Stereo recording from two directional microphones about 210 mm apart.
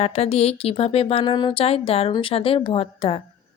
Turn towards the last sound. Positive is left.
turn(degrees=25)  # may be behind; listen again after turning